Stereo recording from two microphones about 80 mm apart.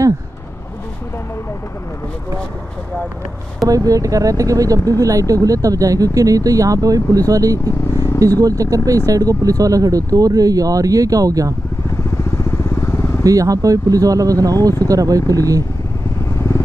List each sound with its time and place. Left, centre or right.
3.6 s speech: right
12.1 s vehicle: left
13.2 s speech: right
16.3 s vehicle: left